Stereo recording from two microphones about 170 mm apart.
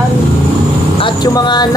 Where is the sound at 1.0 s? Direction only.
25° left (ahead or behind).